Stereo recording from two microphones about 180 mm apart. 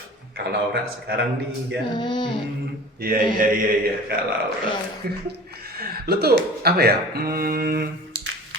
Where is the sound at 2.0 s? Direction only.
25° left (ahead or behind).